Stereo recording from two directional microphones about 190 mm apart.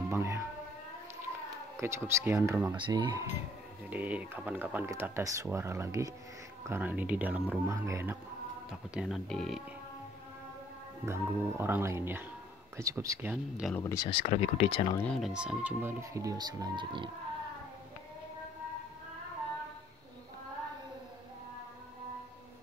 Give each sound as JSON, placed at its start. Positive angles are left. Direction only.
{"t": 0.1, "sound": "speech", "side_deg": -15}
{"t": 1.8, "sound": "speech", "side_deg": -15}
{"t": 2.7, "sound": "speech", "side_deg": -25}
{"t": 3.9, "sound": "speech", "side_deg": -10}
{"t": 8.9, "sound": "speech", "side_deg": 0}
{"t": 11.1, "sound": "speech", "side_deg": -10}
{"t": 13.7, "sound": "speech", "side_deg": 15}
{"t": 14.2, "sound": "speech", "side_deg": 35}
{"t": 15.0, "sound": "speech", "side_deg": 5}